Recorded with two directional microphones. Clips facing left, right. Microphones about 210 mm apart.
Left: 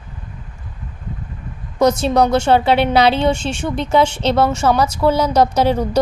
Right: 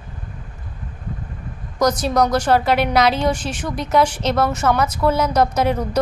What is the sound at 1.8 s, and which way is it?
A woman's voice, 25° left (ahead or behind).